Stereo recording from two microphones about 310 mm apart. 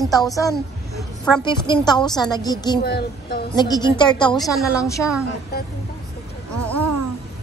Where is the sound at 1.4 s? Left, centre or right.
Centre.